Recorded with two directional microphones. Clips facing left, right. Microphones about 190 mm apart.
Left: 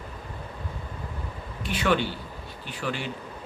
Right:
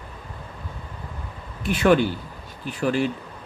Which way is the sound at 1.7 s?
45° right (ahead or behind).